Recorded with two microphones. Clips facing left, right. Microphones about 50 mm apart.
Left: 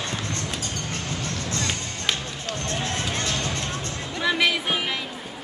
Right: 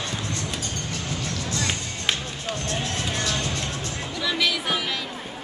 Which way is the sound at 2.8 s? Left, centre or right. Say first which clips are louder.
Even; left.